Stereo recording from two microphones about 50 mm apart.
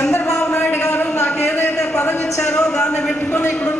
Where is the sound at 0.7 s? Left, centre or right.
Left.